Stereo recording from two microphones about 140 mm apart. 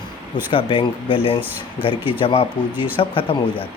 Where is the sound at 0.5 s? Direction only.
35° left (ahead or behind).